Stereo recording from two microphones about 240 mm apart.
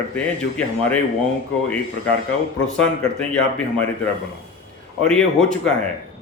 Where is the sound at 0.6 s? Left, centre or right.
Centre.